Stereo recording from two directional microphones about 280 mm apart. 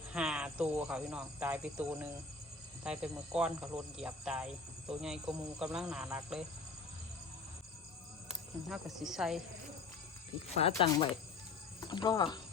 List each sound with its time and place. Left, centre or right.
0.1 s speech: centre
8.3 s speech: centre
10.5 s speech: left
11.9 s speech: centre